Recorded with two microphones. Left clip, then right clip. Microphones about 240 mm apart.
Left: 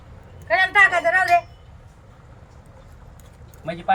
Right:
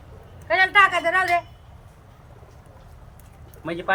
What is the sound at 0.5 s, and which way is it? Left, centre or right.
Speech, centre.